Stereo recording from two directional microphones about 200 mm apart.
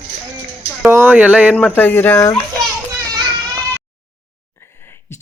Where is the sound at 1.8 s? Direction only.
10° left (ahead or behind).